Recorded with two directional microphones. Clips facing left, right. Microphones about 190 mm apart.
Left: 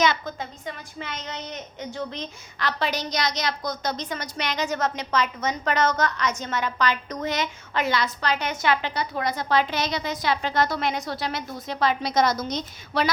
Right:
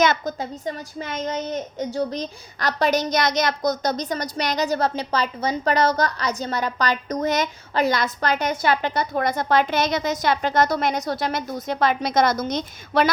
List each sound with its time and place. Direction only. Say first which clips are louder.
0.0 s a child's voice: right 3 dB; 45° right (ahead or behind)